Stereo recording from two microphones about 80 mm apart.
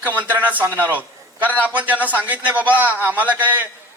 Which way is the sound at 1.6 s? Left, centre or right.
Centre.